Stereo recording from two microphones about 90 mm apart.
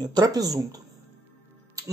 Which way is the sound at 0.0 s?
50° right (ahead or behind).